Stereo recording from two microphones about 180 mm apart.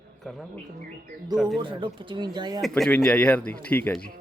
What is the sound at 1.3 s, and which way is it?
Speech, centre (ahead or behind).